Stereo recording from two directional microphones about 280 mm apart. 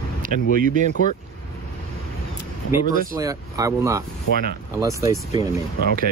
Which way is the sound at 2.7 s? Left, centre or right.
Centre.